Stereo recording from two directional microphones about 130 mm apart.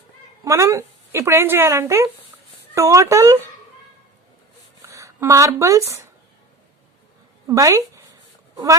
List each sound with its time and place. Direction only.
0.4 s speech: 25° right (ahead or behind)
4.9 s speech: 25° right (ahead or behind)
7.4 s speech: 25° right (ahead or behind)